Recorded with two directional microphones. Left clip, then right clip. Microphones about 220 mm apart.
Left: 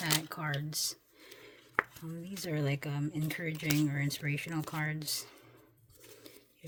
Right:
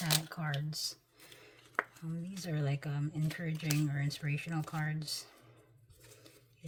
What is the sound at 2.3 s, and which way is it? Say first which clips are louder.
Speech: left 5 dB; 30° left (ahead or behind).